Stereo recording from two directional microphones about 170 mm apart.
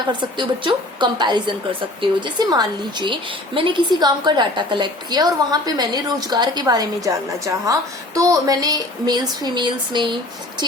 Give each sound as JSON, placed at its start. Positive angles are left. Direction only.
{"t": 0.1, "sound": "a woman's voice", "side_deg": -30}